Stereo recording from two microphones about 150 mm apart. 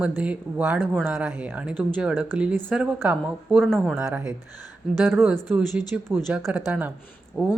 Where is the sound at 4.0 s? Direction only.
20° right (ahead or behind).